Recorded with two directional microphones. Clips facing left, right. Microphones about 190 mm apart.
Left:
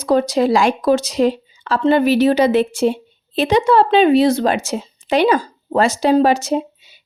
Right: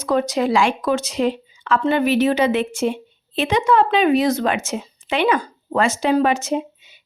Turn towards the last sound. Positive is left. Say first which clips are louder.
# left 3 dB
turn(degrees=35)  # may be behind; listen again after turning